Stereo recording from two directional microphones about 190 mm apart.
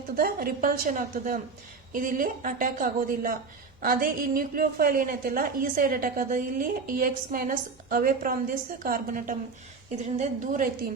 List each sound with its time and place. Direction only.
0.2 s a woman's voice: 50° right (ahead or behind)